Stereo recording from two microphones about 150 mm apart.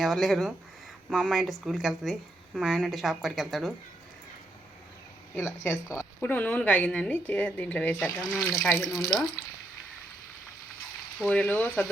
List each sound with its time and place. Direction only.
0.0 s a woman's voice: centre (ahead or behind)
5.4 s a woman's voice: 15° left (ahead or behind)
11.2 s a woman's voice: 5° left (ahead or behind)